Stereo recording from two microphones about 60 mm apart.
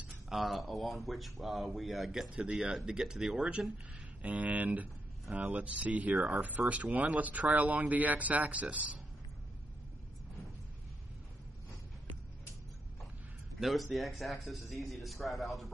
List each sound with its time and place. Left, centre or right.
0.3 s speech: centre; by 6.1 s right
6.6 s speech: centre
7.0 s speech: right
13.6 s a man's voice: centre